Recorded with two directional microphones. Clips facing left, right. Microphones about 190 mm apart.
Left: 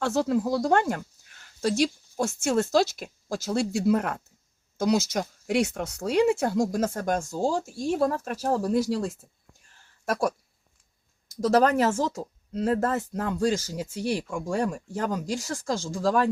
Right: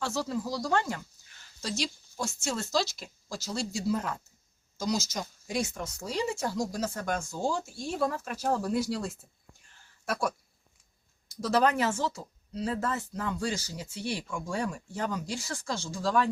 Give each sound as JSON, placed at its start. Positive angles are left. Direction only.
{"t": 0.0, "sound": "speech", "side_deg": 55}
{"t": 10.1, "sound": "speech", "side_deg": 40}
{"t": 11.3, "sound": "speech", "side_deg": 40}